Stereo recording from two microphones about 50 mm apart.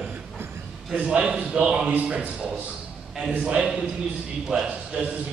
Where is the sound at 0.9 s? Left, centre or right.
Right.